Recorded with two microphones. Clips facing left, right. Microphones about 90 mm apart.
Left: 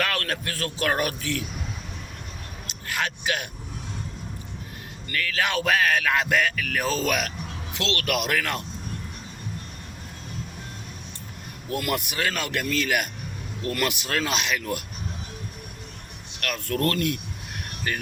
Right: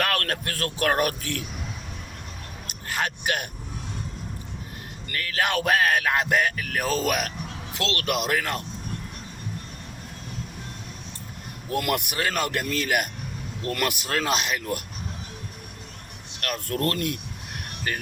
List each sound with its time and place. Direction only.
0.0 s speech: 50° right (ahead or behind)
2.6 s speech: 40° right (ahead or behind)
5.0 s speech: 40° right (ahead or behind)
8.0 s speech: 30° right (ahead or behind)
11.8 s a man's voice: 55° right (ahead or behind)
12.1 s speech: 40° right (ahead or behind)
16.4 s speech: 40° right (ahead or behind)
16.7 s speech: 25° right (ahead or behind)